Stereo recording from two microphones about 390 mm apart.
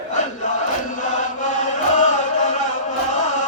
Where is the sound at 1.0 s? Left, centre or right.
Centre.